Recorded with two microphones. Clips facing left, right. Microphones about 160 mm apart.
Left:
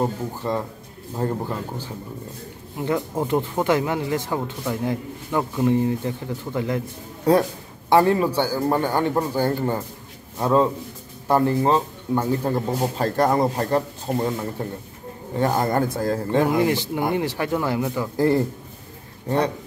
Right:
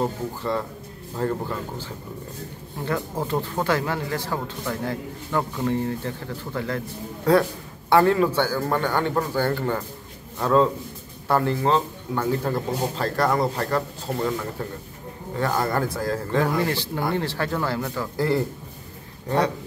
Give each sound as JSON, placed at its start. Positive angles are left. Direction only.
{"t": 0.0, "sound": "speech", "side_deg": 15}
{"t": 2.8, "sound": "speech", "side_deg": 20}
{"t": 7.9, "sound": "speech", "side_deg": 20}